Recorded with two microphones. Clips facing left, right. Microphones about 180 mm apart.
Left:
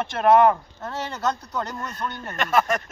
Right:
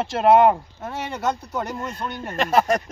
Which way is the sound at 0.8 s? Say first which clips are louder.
Right 1 dB; 10° right (ahead or behind).